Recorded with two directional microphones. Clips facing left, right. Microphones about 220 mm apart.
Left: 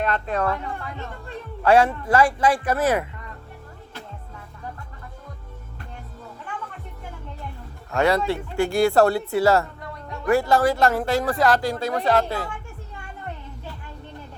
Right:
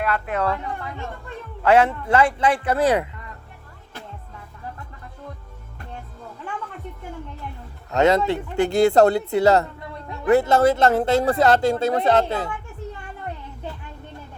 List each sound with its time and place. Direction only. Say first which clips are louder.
0.3 s speech: even; 20° right (ahead or behind)
1.8 s speech: even; 25° right (ahead or behind)
2.8 s speech: right 3 dB; 15° right (ahead or behind)
7.9 s speech: right 3 dB; 20° right (ahead or behind)